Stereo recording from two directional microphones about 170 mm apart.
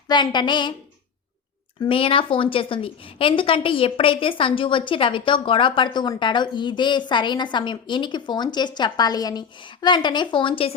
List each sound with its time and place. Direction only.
0.1 s a woman's voice: 25° left (ahead or behind)
1.8 s a woman's voice: 30° left (ahead or behind)